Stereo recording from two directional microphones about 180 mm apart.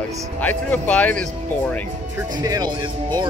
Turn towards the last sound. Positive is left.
turn(degrees=-25)  # may be behind; listen again after turning